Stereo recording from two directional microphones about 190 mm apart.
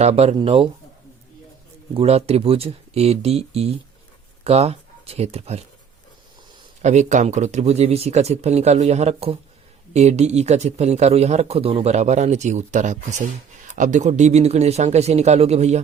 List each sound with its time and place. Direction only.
0.0 s speech: 35° right (ahead or behind)
1.9 s speech: 30° right (ahead or behind)
6.8 s speech: 40° right (ahead or behind)